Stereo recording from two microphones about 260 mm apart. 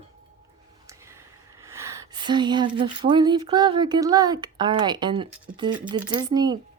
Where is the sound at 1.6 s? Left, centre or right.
Centre.